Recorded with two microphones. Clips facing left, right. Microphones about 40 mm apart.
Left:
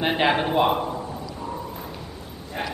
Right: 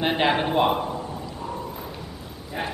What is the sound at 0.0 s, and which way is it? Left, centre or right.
A woman's voice, centre.